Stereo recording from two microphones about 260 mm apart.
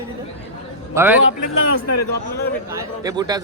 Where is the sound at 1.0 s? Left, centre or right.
Centre.